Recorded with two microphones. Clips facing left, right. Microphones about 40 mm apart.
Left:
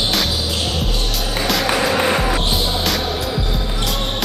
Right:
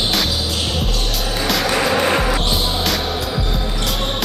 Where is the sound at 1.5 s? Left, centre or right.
Centre.